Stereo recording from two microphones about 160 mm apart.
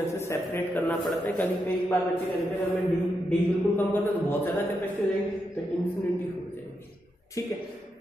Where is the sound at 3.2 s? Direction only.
10° left (ahead or behind).